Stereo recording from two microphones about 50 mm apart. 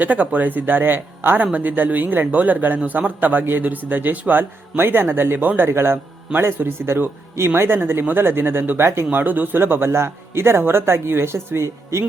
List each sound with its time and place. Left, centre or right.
0.0 s a man's voice: right
4.8 s speech: right